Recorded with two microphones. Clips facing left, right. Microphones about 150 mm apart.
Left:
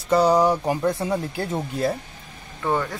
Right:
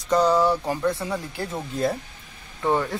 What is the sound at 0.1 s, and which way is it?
Speech, 10° left (ahead or behind).